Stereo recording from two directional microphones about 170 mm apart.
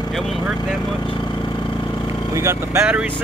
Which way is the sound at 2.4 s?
15° right (ahead or behind).